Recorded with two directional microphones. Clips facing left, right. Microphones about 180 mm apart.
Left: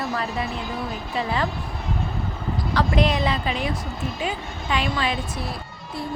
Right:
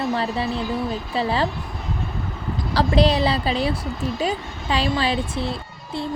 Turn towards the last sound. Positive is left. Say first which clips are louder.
# right 4 dB
turn(degrees=-30)  # may be behind; listen again after turning